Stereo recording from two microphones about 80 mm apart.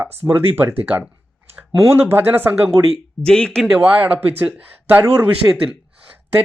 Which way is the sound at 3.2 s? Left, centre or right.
Centre.